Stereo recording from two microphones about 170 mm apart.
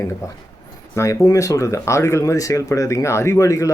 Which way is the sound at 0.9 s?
15° left (ahead or behind).